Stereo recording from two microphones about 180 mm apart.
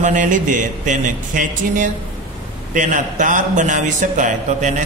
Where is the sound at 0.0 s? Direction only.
45° right (ahead or behind).